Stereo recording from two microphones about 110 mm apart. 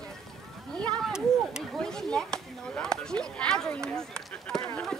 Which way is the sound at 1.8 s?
5° left (ahead or behind).